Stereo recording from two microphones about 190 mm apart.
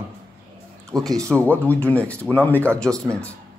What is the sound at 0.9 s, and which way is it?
A man's voice, 5° left (ahead or behind).